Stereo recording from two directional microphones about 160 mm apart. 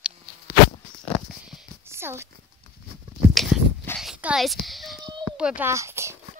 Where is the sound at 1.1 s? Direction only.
Centre (ahead or behind).